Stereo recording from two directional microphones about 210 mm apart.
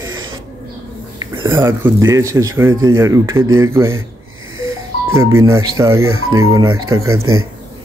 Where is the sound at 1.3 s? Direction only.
15° right (ahead or behind).